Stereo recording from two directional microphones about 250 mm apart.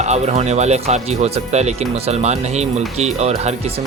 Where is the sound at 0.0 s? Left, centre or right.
Right.